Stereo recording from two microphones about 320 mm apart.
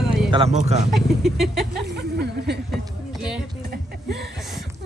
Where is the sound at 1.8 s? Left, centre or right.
Right.